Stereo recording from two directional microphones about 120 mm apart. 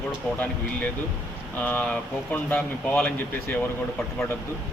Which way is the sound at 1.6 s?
15° left (ahead or behind).